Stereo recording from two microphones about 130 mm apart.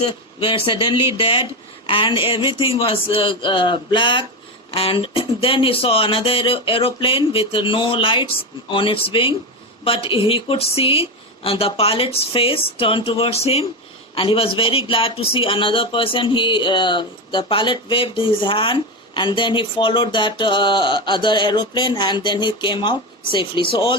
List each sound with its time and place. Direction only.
0.3 s a woman's voice: 45° left (ahead or behind)